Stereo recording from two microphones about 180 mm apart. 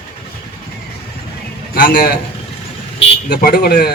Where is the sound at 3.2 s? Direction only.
65° left (ahead or behind).